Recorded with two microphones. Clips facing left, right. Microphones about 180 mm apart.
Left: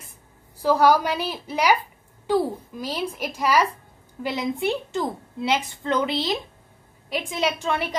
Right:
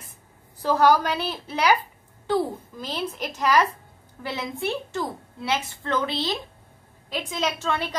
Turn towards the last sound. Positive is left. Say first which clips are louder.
# left 2 dB
turn(degrees=15)  # may be behind; listen again after turning